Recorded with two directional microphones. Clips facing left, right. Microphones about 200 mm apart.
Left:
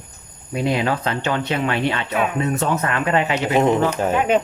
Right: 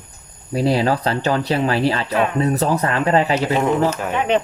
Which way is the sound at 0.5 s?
35° right (ahead or behind).